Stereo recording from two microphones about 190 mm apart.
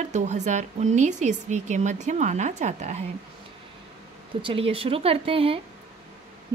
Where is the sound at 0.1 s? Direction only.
40° right (ahead or behind).